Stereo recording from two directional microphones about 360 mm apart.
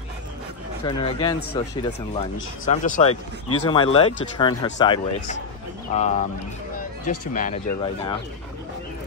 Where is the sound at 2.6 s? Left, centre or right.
Left.